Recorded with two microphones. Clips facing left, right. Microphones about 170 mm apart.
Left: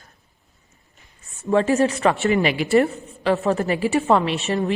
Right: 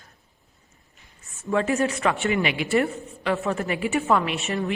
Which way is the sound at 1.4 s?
35° left (ahead or behind).